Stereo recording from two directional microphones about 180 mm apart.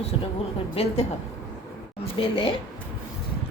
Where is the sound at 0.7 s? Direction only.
35° left (ahead or behind).